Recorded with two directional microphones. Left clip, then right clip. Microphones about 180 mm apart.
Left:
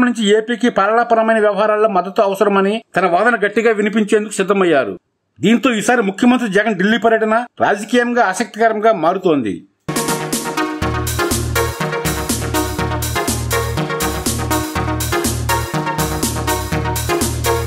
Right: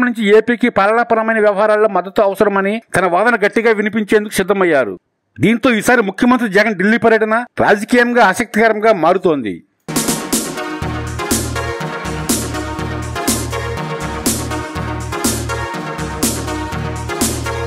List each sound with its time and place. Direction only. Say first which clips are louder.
0.0 s a man's voice: right 3 dB; 40° right (ahead or behind)
9.9 s music: right 1 dB; centre (ahead or behind)